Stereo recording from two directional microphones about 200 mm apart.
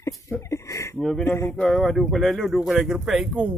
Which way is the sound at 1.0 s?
5° left (ahead or behind).